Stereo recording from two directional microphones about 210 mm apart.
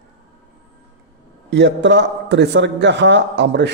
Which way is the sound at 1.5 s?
55° right (ahead or behind).